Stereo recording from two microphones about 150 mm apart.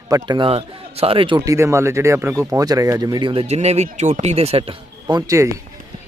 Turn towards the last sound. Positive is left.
turn(degrees=-20)  # may be behind; listen again after turning